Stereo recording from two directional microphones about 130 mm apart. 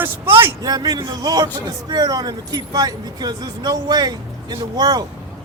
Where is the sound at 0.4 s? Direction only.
30° right (ahead or behind).